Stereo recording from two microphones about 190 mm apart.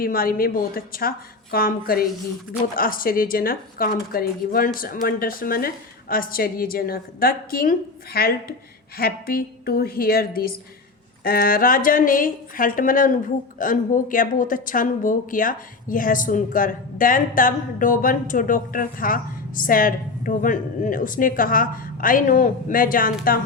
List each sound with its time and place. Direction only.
0.0 s speech: 50° left (ahead or behind)